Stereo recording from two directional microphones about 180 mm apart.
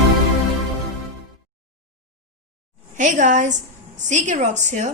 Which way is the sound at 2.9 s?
45° right (ahead or behind).